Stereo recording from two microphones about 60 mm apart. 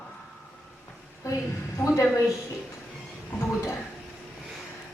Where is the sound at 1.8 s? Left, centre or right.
Left.